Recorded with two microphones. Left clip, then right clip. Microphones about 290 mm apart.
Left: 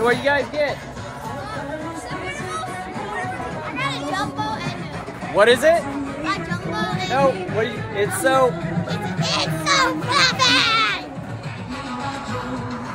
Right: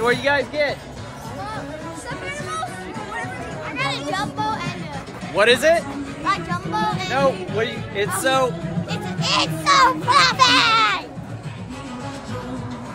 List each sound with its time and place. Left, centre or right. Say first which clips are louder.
0.0 s speech: even; centre
3.7 s music: right 1 dB; centre
5.3 s speech: left 1 dB; centre
6.2 s music: right 4 dB; centre
7.1 s speech: left 5 dB; centre
8.9 s speech: right 3 dB; centre